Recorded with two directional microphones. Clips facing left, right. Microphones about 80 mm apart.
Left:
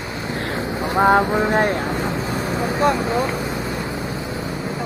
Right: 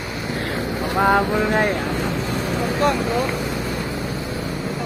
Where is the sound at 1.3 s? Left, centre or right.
Left.